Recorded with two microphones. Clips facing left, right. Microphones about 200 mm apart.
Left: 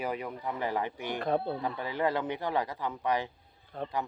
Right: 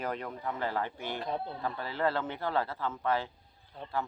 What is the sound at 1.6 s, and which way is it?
Speech, 15° left (ahead or behind).